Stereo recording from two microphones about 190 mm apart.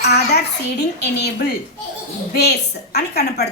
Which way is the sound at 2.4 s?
60° left (ahead or behind).